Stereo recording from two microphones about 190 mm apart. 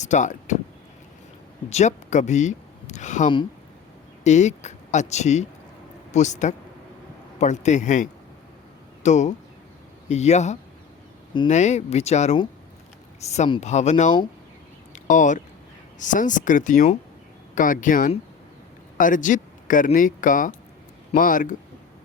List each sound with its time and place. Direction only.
0.0 s speech: 40° left (ahead or behind)
1.7 s speech: 40° left (ahead or behind)
14.9 s a sound: 40° left (ahead or behind)
16.0 s speech: 40° left (ahead or behind)